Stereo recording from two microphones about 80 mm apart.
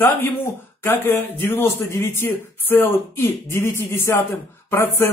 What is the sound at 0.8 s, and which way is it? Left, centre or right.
Speech, left.